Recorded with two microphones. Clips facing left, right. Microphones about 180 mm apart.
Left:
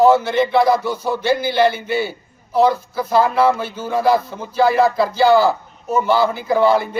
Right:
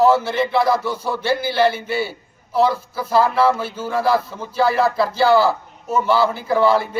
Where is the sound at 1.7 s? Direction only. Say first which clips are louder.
Left 2 dB; 30° right (ahead or behind).